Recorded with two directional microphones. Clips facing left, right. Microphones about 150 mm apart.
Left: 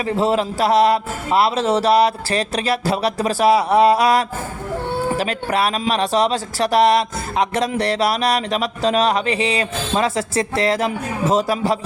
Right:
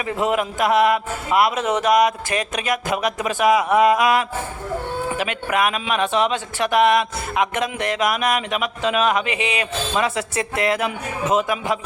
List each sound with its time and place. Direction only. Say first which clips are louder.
0.0 s speech: left 3 dB; 30° left (ahead or behind)